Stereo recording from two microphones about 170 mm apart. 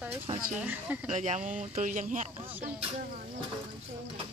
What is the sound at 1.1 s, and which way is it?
Speech, 40° right (ahead or behind).